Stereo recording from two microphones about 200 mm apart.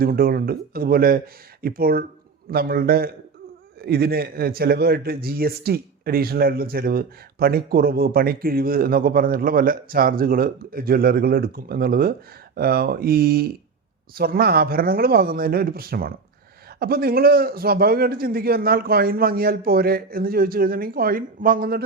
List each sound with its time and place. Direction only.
0.0 s a man's voice: 45° right (ahead or behind)